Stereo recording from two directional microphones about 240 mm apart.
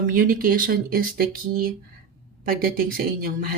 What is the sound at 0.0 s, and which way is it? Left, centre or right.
Speech, right.